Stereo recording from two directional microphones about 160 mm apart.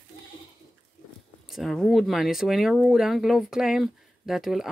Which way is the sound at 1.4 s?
Centre (ahead or behind).